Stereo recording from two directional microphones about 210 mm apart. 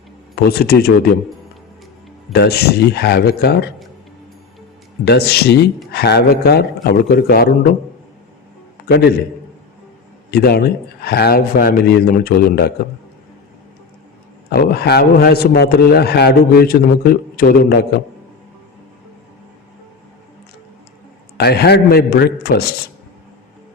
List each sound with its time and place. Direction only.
0.3 s a man's voice: 50° left (ahead or behind)
2.3 s a man's voice: 50° left (ahead or behind)
5.0 s a man's voice: 50° left (ahead or behind)
8.9 s a man's voice: 45° left (ahead or behind)
10.3 s a man's voice: 50° left (ahead or behind)
14.5 s a man's voice: 50° left (ahead or behind)
21.3 s a man's voice: 50° left (ahead or behind)